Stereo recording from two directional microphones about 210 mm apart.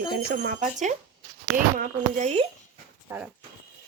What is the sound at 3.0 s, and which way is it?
Speech, 10° right (ahead or behind).